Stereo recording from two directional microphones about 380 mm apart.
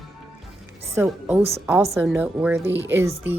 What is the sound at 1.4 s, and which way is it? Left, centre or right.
Music, centre.